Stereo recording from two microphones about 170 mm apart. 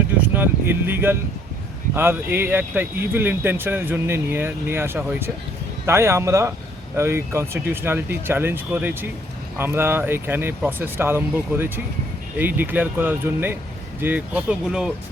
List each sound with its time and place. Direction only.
0.2 s speech: 10° right (ahead or behind)